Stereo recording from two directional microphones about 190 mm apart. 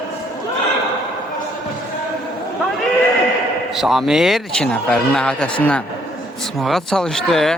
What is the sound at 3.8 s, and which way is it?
A man's voice, centre (ahead or behind).